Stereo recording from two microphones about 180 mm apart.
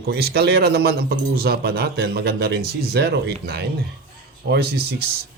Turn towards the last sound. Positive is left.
turn(degrees=-60)  # may be behind; listen again after turning